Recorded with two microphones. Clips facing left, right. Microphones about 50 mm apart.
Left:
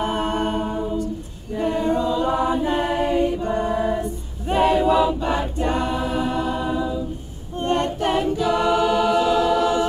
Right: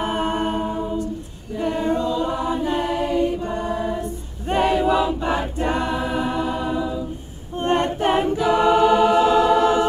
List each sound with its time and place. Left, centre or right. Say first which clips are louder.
0.0 s a capella: even; centre
1.8 s choir: even; centre
2.0 s choir: left 2 dB; centre
3.3 s choir: left 1 dB; centre
3.5 s music: left 3 dB; centre
4.5 s choir: left 1 dB; centre
7.5 s a capella: right 1 dB; right